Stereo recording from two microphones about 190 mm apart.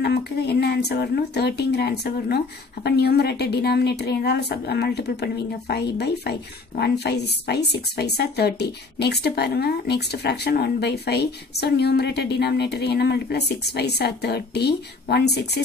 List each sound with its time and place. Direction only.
0.0 s speech: 60° left (ahead or behind)